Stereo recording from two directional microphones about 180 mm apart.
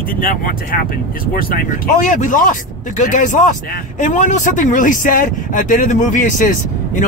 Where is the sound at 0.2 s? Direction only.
50° left (ahead or behind).